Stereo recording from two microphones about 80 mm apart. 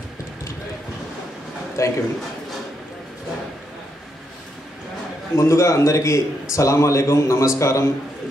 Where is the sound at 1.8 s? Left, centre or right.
Left.